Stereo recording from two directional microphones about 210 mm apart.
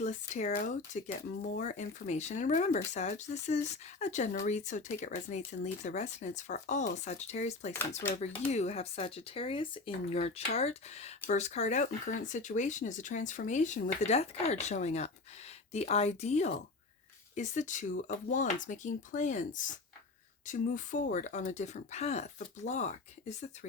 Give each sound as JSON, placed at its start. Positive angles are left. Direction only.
{"t": 0.0, "sound": "speech", "side_deg": 35}